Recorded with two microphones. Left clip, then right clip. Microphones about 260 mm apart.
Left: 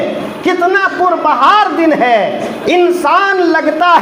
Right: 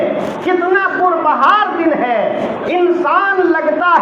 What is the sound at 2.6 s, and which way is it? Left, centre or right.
A woman's voice, left.